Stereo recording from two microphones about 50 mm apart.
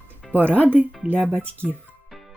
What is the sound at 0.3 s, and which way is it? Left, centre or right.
Speech, right.